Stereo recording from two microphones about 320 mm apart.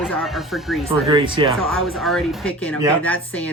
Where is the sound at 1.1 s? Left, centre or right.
Centre.